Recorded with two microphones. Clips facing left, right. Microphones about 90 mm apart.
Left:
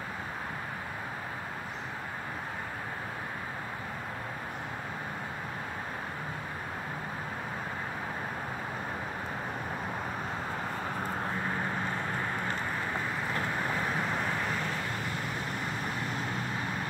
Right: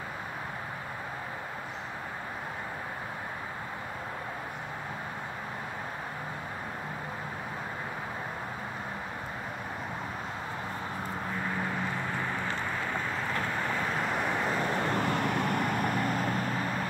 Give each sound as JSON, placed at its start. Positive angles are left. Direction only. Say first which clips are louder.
{"t": 12.9, "sound": "vehicle", "louder": "right 1 dB", "side_deg": 15}
{"t": 14.0, "sound": "vehicle", "louder": "right 2 dB", "side_deg": -10}
{"t": 14.9, "sound": "vehicle", "louder": "right 7 dB", "side_deg": -60}